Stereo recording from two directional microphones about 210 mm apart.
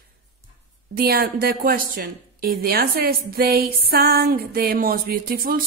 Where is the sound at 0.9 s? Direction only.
45° right (ahead or behind).